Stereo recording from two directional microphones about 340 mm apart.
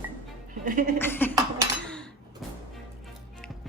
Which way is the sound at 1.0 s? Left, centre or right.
Centre.